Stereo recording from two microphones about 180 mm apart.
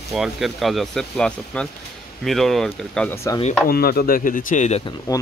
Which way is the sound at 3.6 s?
55° left (ahead or behind).